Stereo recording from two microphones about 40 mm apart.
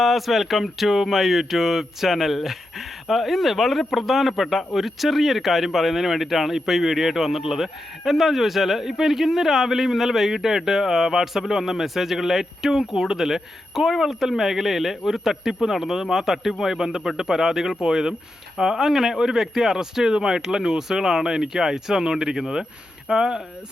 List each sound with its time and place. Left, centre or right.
0.0 s speech: centre